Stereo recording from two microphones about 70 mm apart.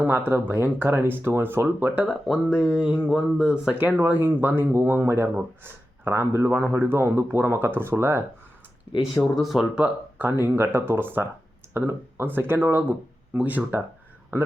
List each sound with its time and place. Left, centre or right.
0.0 s speech: right
1.8 s speech: right
2.2 s speech: centre
3.8 s speech: right
9.2 s speech: centre
9.7 s speech: right
13.3 s speech: right